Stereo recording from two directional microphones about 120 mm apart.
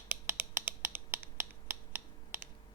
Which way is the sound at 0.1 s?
20° right (ahead or behind).